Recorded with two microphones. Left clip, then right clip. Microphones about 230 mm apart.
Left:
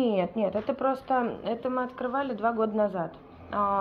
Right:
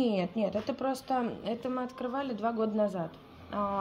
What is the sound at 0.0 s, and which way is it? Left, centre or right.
A woman's voice, right.